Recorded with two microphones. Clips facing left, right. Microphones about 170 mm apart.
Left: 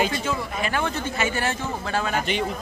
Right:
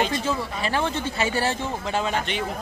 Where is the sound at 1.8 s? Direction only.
20° right (ahead or behind).